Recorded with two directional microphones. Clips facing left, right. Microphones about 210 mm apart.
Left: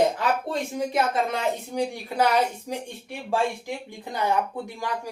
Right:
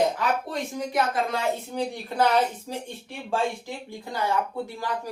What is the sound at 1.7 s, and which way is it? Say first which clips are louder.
Speech: left 2 dB; 10° left (ahead or behind).